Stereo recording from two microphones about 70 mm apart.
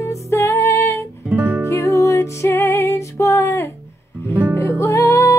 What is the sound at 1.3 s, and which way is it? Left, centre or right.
Music, right.